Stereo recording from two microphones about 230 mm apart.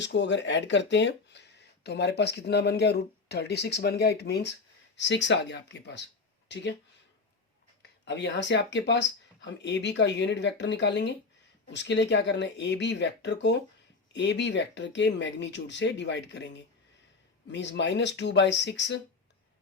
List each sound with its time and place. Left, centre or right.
0.0 s speech: left
7.8 s speech: left